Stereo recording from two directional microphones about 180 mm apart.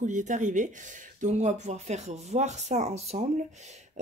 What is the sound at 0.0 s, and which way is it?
Speech, 45° right (ahead or behind).